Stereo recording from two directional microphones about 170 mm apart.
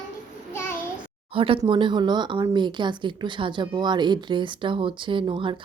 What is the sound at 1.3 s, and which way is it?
Speech, 30° right (ahead or behind).